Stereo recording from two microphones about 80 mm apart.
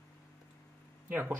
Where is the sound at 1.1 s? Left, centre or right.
Right.